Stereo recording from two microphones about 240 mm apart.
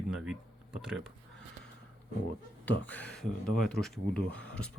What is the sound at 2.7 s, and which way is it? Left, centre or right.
Speech, centre.